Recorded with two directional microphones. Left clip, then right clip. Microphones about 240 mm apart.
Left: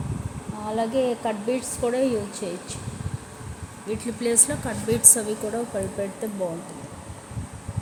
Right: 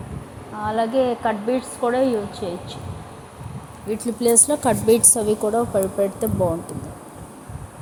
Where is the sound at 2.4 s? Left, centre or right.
Right.